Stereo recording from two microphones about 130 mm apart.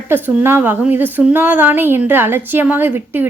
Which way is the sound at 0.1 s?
15° right (ahead or behind).